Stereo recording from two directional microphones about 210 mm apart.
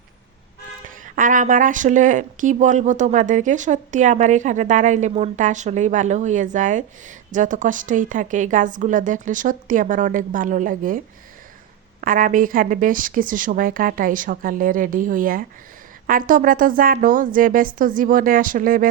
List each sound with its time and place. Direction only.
0.9 s a woman's voice: 40° right (ahead or behind)